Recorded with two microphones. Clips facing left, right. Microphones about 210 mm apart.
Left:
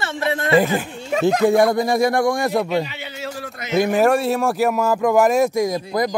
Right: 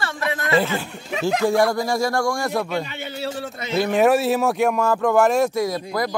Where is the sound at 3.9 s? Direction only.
Centre (ahead or behind).